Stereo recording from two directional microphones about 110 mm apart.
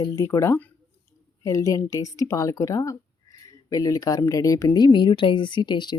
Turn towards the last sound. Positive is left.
turn(degrees=40)  # may be behind; listen again after turning